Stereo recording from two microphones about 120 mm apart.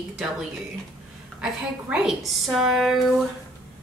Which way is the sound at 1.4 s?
5° right (ahead or behind).